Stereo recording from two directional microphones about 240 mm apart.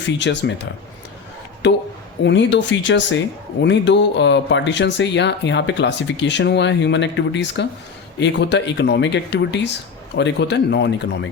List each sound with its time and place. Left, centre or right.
0.2 s speech: left
2.2 s speech: left